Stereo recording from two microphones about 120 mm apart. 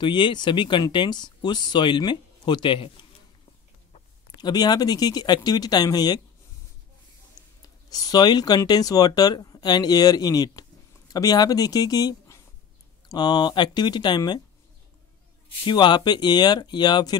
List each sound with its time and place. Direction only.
0.0 s speech: 40° left (ahead or behind)
4.4 s speech: 35° left (ahead or behind)
7.4 s a sound: 35° left (ahead or behind)
7.9 s speech: 35° left (ahead or behind)
15.6 s speech: 40° left (ahead or behind)